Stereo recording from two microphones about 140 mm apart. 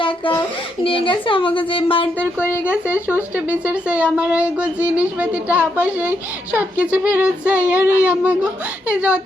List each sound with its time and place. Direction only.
0.9 s a woman's voice: 40° left (ahead or behind)
2.4 s speech: 10° right (ahead or behind)